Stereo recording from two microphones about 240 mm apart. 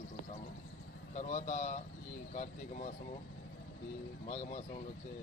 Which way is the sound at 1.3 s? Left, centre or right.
Left.